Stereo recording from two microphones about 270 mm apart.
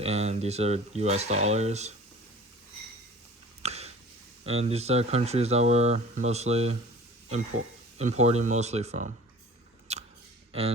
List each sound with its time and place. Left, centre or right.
0.0 s speech: right
3.6 s a sound: right
4.7 s speech: right
7.9 s speech: right
9.9 s scissors: right
10.5 s speech: right